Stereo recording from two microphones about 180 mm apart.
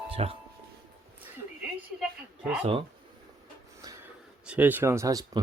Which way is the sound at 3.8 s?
15° right (ahead or behind).